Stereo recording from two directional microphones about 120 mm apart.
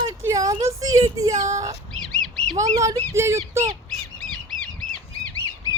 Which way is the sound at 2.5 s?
75° right (ahead or behind).